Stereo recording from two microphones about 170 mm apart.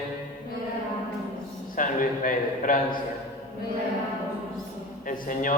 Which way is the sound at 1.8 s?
55° left (ahead or behind).